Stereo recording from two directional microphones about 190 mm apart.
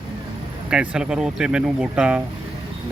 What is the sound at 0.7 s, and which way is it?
Speech, 5° right (ahead or behind).